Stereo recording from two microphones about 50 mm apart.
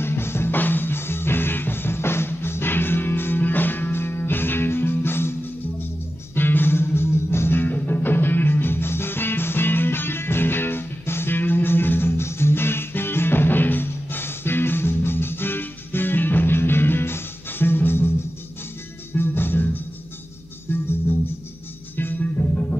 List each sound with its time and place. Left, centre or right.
0.0 s music: left
0.6 s music: left
19.1 s music: left
21.9 s music: left